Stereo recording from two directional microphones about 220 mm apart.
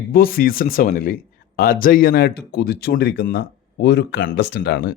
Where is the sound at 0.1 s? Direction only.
40° left (ahead or behind).